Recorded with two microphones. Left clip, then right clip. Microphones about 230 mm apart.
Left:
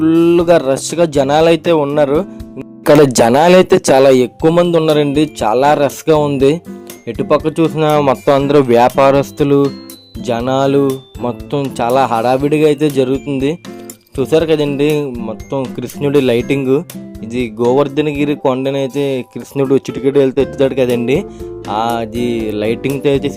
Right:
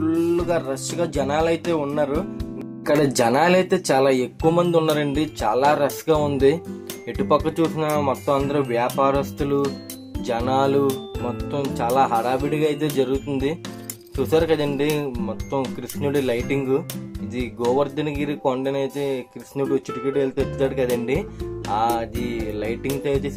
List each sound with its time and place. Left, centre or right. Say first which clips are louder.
0.0 s speech: left 11 dB; left